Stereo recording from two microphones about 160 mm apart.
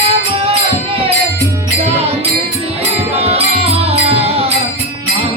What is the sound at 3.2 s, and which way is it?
Music, 40° right (ahead or behind).